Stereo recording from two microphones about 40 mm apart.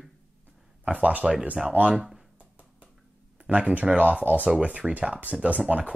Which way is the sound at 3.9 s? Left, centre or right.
Right.